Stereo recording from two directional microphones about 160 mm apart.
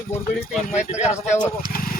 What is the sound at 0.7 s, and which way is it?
Speech, 45° left (ahead or behind).